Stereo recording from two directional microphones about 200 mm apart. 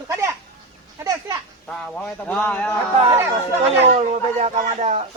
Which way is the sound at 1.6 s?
5° left (ahead or behind).